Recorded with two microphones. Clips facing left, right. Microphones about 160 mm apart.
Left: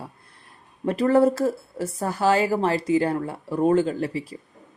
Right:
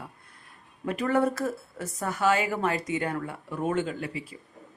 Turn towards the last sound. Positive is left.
turn(degrees=35)  # may be behind; listen again after turning